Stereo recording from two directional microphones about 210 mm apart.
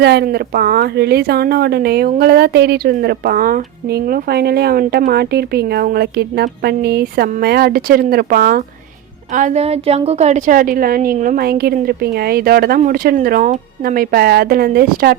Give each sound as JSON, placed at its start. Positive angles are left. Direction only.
{"t": 0.0, "sound": "speech", "side_deg": -50}